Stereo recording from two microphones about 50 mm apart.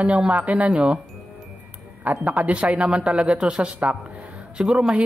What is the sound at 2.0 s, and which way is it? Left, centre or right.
Speech, right.